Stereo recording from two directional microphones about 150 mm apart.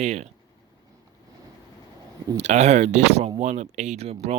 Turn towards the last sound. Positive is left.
turn(degrees=-45)  # may be behind; listen again after turning